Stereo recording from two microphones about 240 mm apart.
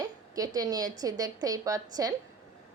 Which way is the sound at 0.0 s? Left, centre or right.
Centre.